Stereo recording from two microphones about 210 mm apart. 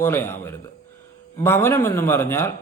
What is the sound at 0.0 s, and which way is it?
A man's voice, 10° left (ahead or behind).